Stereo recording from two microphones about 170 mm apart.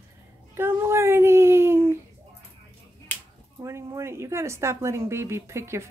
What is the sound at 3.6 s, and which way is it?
Speech, 15° right (ahead or behind).